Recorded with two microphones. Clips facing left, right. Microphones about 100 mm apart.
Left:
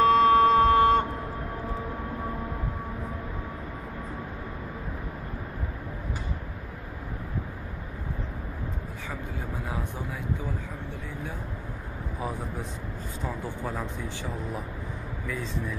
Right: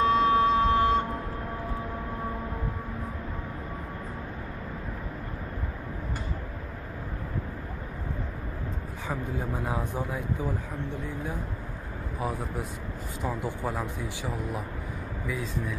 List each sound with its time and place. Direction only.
0.0 s a sound: 55° left (ahead or behind)
9.7 s speech: 20° right (ahead or behind)
13.2 s speech: 15° right (ahead or behind)